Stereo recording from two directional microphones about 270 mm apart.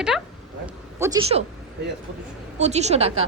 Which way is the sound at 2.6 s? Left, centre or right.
Right.